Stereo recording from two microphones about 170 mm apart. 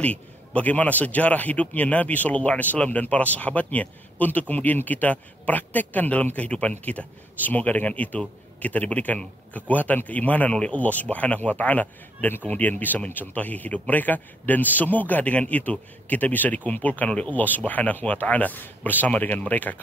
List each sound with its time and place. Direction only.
0.0 s a man's voice: 10° left (ahead or behind)